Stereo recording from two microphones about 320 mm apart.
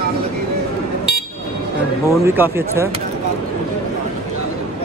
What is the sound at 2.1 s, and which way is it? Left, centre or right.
Speech, centre.